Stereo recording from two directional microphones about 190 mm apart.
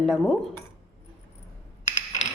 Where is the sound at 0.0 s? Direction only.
Centre (ahead or behind).